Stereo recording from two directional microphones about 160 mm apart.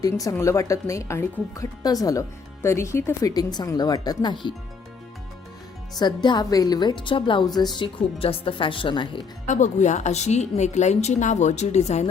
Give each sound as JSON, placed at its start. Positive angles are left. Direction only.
{"t": 0.0, "sound": "speech", "side_deg": 20}
{"t": 6.0, "sound": "speech", "side_deg": 25}
{"t": 9.5, "sound": "a woman's voice", "side_deg": 50}